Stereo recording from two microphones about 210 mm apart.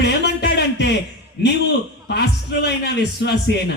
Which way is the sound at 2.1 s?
55° left (ahead or behind).